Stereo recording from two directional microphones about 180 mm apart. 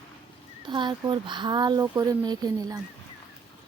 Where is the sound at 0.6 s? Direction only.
25° right (ahead or behind).